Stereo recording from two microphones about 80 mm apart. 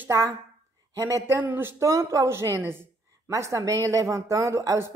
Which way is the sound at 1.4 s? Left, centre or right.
Right.